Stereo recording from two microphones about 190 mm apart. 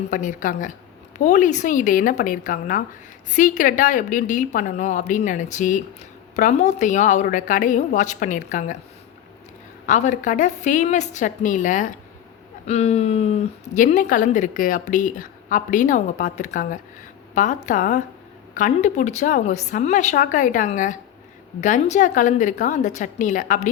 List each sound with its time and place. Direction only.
0.1 s a woman's voice: 45° left (ahead or behind)
9.8 s speech: 40° left (ahead or behind)